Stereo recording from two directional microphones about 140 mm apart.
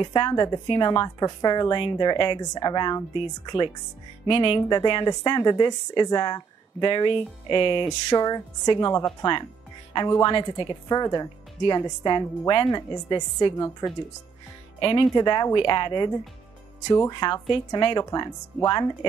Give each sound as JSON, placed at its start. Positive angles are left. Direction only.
{"t": 0.0, "sound": "a woman's voice", "side_deg": 35}